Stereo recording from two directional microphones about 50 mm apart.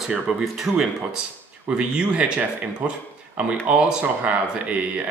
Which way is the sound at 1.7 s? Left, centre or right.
Right.